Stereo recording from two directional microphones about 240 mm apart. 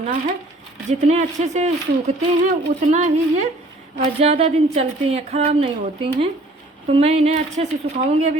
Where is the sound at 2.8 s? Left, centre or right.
Right.